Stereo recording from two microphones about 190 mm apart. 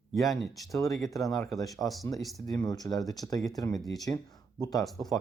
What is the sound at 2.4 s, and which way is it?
Speech, 20° left (ahead or behind).